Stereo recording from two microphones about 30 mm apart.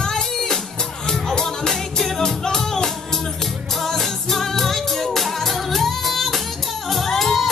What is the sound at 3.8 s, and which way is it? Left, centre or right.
Music, centre.